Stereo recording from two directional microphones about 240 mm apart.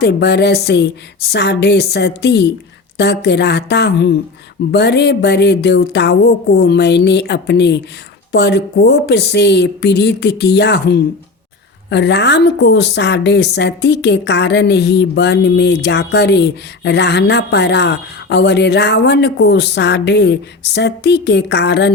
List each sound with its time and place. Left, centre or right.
0.0 s a woman's voice: left